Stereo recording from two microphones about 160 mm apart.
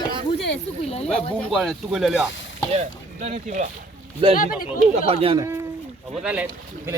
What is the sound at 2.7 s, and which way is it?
Speech, 50° right (ahead or behind).